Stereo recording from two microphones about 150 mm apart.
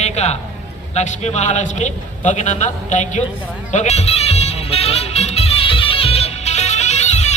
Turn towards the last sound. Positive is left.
turn(degrees=50)  # may be behind; listen again after turning